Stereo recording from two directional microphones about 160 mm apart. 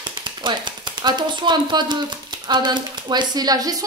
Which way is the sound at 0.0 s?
30° right (ahead or behind).